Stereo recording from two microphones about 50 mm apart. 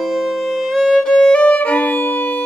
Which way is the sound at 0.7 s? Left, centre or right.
Centre.